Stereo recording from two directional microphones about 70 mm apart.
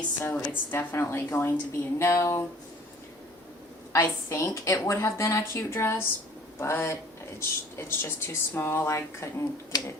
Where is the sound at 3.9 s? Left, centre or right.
Left.